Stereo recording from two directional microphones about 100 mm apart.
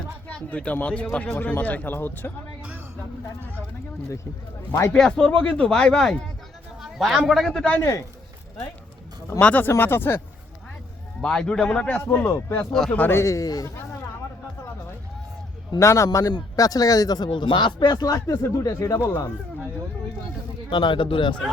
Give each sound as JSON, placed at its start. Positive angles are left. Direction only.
{"t": 0.3, "sound": "speech", "side_deg": 10}
{"t": 4.9, "sound": "speech", "side_deg": 5}
{"t": 6.8, "sound": "a sound", "side_deg": 0}
{"t": 7.3, "sound": "speech", "side_deg": 0}
{"t": 7.8, "sound": "speech", "side_deg": 30}
{"t": 9.4, "sound": "speech", "side_deg": 15}
{"t": 11.2, "sound": "speech", "side_deg": 10}
{"t": 12.2, "sound": "speech", "side_deg": 25}
{"t": 13.1, "sound": "speech", "side_deg": 30}
{"t": 15.8, "sound": "speech", "side_deg": 30}
{"t": 16.0, "sound": "speech", "side_deg": 40}
{"t": 17.2, "sound": "speech", "side_deg": 50}
{"t": 20.7, "sound": "speech", "side_deg": 50}